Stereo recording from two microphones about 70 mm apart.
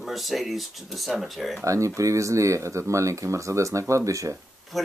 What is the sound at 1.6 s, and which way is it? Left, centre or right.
Speech, right.